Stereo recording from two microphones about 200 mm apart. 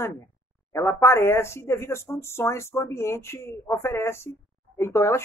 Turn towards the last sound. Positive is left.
turn(degrees=15)  # may be behind; listen again after turning